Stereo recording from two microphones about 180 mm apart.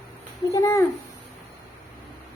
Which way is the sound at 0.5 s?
15° left (ahead or behind).